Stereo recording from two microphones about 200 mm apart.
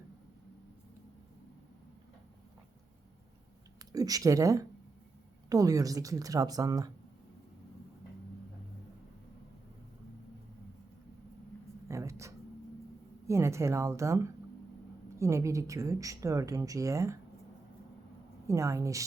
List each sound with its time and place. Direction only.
3.9 s speech: 20° right (ahead or behind)
11.9 s a sound: 15° right (ahead or behind)
13.2 s speech: 15° right (ahead or behind)
18.4 s speech: 15° right (ahead or behind)